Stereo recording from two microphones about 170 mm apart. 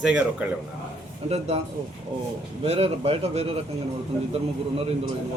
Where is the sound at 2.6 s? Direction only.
35° right (ahead or behind).